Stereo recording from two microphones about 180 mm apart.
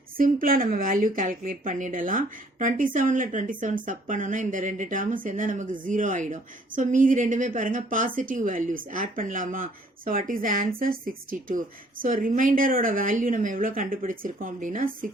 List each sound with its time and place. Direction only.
0.2 s speech: 50° right (ahead or behind)